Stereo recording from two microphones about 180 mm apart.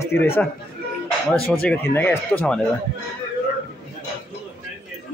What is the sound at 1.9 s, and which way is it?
Speech, 10° left (ahead or behind).